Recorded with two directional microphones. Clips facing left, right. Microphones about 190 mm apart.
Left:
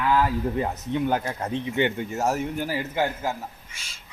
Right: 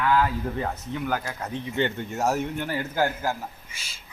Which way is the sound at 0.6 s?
20° left (ahead or behind).